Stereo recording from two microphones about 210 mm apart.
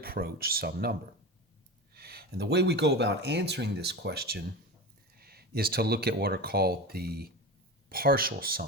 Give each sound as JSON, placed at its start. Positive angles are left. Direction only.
{"t": 0.0, "sound": "speech", "side_deg": -45}